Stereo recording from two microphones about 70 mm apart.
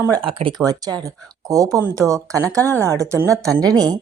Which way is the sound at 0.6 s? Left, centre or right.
Right.